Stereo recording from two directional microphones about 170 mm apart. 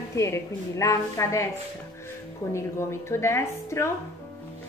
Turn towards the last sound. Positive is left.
turn(degrees=15)  # may be behind; listen again after turning